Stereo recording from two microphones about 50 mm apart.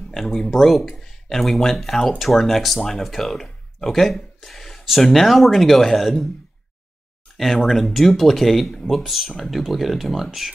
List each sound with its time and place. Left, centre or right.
0.1 s speech: centre
7.3 s speech: centre